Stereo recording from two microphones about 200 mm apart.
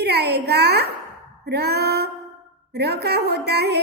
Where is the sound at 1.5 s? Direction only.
55° right (ahead or behind).